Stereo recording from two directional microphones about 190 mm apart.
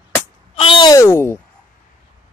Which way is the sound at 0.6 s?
25° left (ahead or behind).